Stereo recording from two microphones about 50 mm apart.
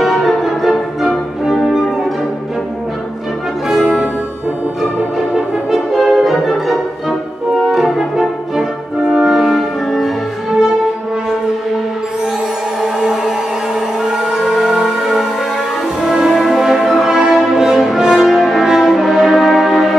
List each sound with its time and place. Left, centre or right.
0.0 s music: centre
3.8 s music: right
5.7 s music: centre
12.8 s music: centre
18.2 s brass instrument: centre